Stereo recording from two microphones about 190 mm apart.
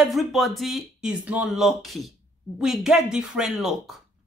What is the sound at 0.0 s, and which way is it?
Speech, centre (ahead or behind).